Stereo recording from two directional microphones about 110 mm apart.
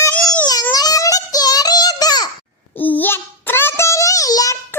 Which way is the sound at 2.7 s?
15° left (ahead or behind).